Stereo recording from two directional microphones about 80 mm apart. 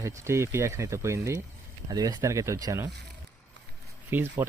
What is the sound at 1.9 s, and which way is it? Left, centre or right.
Speech, right.